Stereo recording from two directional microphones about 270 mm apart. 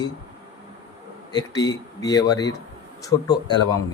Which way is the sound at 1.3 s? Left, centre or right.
Centre.